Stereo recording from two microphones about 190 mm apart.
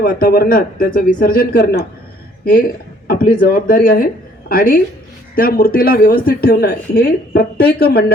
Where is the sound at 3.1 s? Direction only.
50° left (ahead or behind).